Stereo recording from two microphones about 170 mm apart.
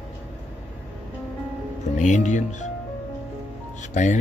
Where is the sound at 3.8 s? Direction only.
45° left (ahead or behind).